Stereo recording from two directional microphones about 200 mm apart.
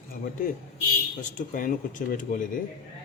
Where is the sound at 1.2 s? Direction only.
40° left (ahead or behind).